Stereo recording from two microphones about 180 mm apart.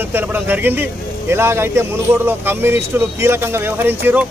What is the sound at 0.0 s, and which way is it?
Speech, 10° right (ahead or behind).